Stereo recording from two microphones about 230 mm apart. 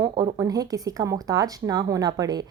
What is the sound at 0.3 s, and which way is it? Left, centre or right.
A woman's voice, centre.